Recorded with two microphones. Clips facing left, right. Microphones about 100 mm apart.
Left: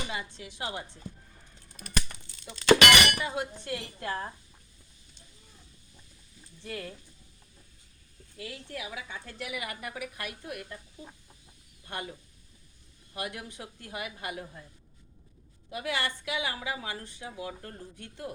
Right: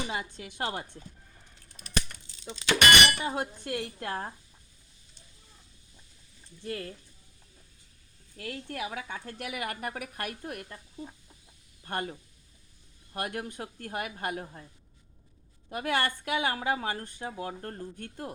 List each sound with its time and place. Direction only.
0.1 s a woman's voice: 45° right (ahead or behind)
2.4 s speech: 55° left (ahead or behind)
2.7 s speech: 90° left
3.2 s a woman's voice: 45° right (ahead or behind)
8.4 s a woman's voice: 50° right (ahead or behind)
11.9 s a woman's voice: 50° right (ahead or behind)
13.1 s a woman's voice: 50° right (ahead or behind)
15.7 s a woman's voice: 50° right (ahead or behind)